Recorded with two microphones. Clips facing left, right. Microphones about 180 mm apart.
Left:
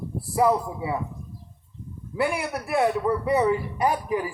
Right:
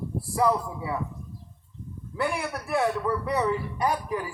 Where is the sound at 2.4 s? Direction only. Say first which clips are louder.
Left 3 dB; 15° left (ahead or behind).